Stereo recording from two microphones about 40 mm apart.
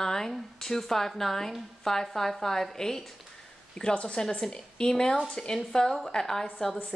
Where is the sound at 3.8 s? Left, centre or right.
Left.